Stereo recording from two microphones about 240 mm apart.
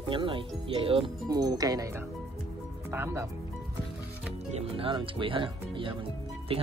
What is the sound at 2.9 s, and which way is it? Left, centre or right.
Speech, centre.